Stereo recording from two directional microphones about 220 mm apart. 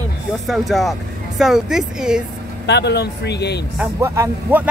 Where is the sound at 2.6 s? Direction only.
50° left (ahead or behind).